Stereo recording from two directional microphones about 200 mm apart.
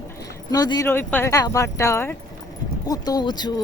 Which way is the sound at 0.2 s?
20° left (ahead or behind).